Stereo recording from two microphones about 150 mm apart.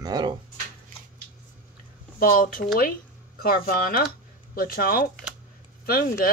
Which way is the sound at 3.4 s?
90° left.